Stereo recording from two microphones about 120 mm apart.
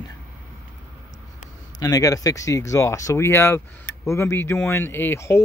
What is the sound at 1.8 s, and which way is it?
Speech, 30° left (ahead or behind).